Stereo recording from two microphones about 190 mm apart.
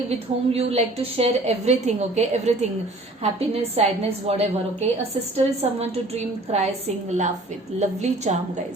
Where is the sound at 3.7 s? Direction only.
35° right (ahead or behind).